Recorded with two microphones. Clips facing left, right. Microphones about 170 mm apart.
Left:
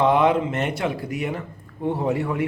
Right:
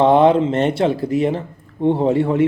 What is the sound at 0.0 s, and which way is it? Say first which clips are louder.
Speech: right 6 dB; 30° right (ahead or behind).